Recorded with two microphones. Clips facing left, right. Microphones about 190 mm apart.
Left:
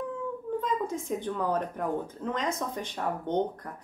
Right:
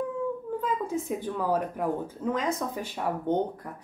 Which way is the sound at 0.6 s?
5° right (ahead or behind).